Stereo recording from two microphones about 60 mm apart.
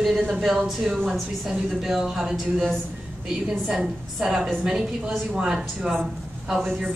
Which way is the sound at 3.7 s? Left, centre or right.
Centre.